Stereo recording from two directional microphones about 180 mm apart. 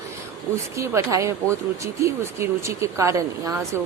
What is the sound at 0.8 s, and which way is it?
Speech, 15° right (ahead or behind).